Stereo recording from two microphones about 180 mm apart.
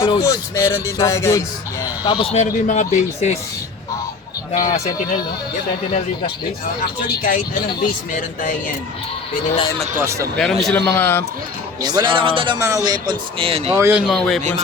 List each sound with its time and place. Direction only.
0.1 s speech: 15° left (ahead or behind)
2.0 s a man's voice: 30° left (ahead or behind)
4.5 s speech: 45° left (ahead or behind)
7.2 s speech: 50° left (ahead or behind)
10.0 s speech: 15° right (ahead or behind)
10.3 s speech: centre (ahead or behind)
11.8 s speech: 20° right (ahead or behind)
12.5 s speech: 15° right (ahead or behind)
13.7 s speech: 15° right (ahead or behind)
14.1 s speech: centre (ahead or behind)